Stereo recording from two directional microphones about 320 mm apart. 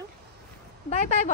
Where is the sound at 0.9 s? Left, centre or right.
Left.